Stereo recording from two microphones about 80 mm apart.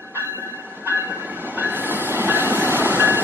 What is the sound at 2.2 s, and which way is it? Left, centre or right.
Vehicle, right.